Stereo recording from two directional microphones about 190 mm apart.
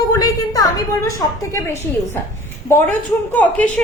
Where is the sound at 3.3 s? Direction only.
5° left (ahead or behind).